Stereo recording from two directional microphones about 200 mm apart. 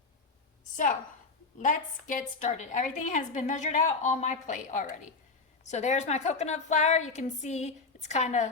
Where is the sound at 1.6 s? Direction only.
40° left (ahead or behind).